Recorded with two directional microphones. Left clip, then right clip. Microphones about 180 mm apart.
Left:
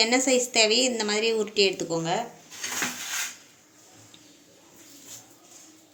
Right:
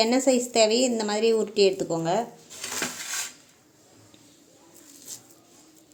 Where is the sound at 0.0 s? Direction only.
45° right (ahead or behind).